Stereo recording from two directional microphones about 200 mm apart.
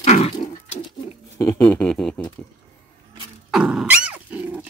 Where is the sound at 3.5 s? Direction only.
Centre (ahead or behind).